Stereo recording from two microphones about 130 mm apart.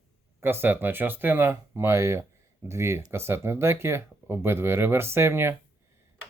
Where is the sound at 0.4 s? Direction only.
15° right (ahead or behind).